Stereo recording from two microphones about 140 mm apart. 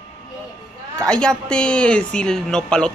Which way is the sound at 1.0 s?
5° left (ahead or behind).